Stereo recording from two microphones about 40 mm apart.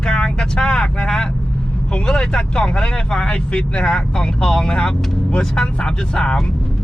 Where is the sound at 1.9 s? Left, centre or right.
Left.